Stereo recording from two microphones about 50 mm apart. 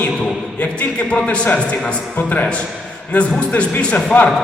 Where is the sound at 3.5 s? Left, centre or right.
Left.